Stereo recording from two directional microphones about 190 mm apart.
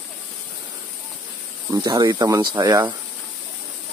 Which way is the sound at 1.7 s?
20° right (ahead or behind).